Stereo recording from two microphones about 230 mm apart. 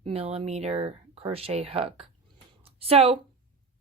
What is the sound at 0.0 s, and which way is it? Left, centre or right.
Speech, right.